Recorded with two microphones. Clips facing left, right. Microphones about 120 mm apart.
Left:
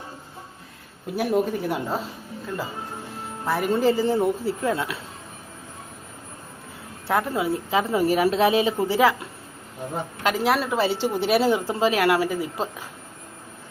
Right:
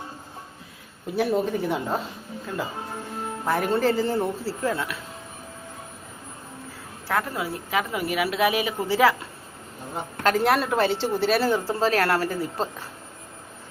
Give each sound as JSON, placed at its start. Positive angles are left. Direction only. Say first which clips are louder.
{"t": 1.1, "sound": "speech", "louder": "left 1 dB", "side_deg": 10}
{"t": 3.4, "sound": "speech", "louder": "left 1 dB", "side_deg": 5}
{"t": 7.1, "sound": "a woman's voice", "louder": "left 4 dB", "side_deg": 25}
{"t": 10.2, "sound": "speech", "louder": "right 1 dB", "side_deg": 5}